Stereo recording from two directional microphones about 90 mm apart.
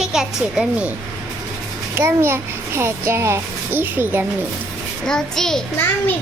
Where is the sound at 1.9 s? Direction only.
30° right (ahead or behind).